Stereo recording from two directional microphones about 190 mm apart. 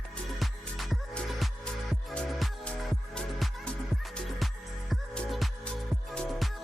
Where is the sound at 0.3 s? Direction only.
Centre (ahead or behind).